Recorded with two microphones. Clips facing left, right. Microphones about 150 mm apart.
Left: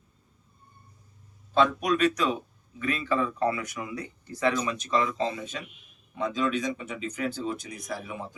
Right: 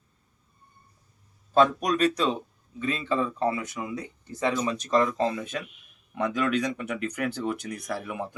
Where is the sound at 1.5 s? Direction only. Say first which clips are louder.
Right 2 dB; 40° right (ahead or behind); by 4.7 s 25° right (ahead or behind).